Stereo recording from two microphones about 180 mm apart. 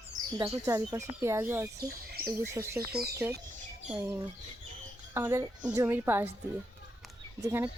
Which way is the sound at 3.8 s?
10° right (ahead or behind).